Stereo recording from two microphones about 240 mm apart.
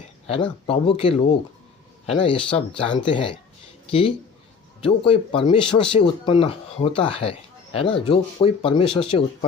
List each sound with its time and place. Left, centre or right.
0.3 s speech: left